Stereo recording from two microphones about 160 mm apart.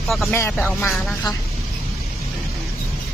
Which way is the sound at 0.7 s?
10° left (ahead or behind).